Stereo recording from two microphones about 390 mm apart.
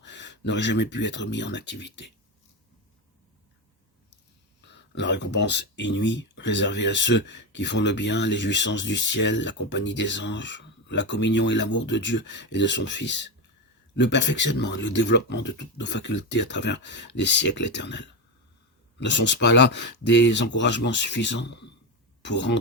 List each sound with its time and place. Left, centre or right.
0.0 s speech: left
4.6 s speech: left